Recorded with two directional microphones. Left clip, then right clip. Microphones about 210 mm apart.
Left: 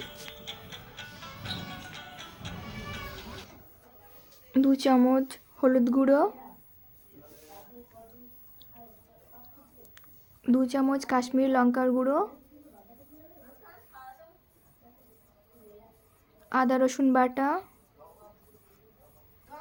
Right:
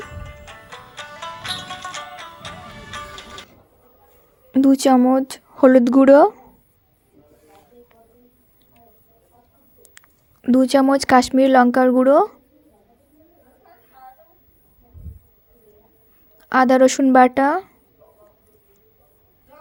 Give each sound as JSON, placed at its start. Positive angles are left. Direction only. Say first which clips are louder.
{"t": 0.9, "sound": "music", "louder": "right 15 dB", "side_deg": -55}
{"t": 4.5, "sound": "speech", "louder": "right 9 dB", "side_deg": -35}
{"t": 10.4, "sound": "speech", "louder": "right 11 dB", "side_deg": -35}
{"t": 16.4, "sound": "speech", "louder": "right 11 dB", "side_deg": -40}